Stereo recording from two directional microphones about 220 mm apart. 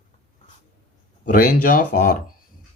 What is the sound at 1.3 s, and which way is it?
Speech, 40° left (ahead or behind).